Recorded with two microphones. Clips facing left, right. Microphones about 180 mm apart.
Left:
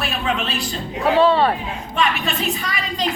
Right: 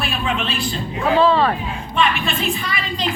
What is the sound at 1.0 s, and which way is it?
Speech, 30° left (ahead or behind).